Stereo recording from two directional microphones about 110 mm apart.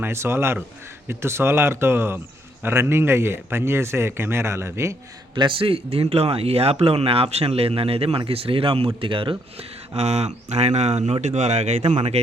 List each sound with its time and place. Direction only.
0.0 s speech: 25° right (ahead or behind)
5.3 s speech: 45° right (ahead or behind)
9.6 s speech: 75° right (ahead or behind)